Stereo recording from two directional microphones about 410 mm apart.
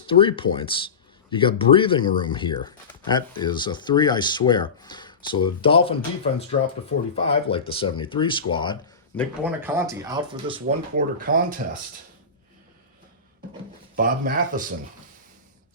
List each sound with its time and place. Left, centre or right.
0.1 s speech: centre
7.3 s speech: centre
9.4 s speech: centre
13.9 s speech: right